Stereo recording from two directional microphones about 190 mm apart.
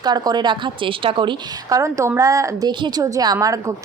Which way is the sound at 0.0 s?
20° right (ahead or behind).